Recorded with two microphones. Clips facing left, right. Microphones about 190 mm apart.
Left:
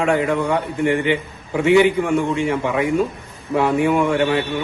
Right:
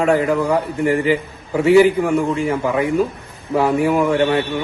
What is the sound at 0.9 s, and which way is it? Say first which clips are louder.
Speech: right 3 dB; 40° right (ahead or behind).